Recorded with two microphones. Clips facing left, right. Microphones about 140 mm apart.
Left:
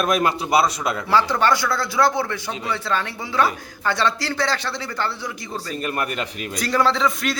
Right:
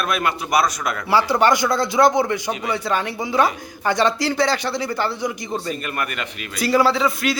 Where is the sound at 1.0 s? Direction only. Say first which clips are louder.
Right 2 dB; 10° right (ahead or behind).